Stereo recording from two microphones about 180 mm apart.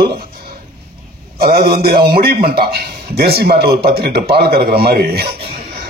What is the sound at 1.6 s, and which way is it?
A man's voice, 60° right (ahead or behind).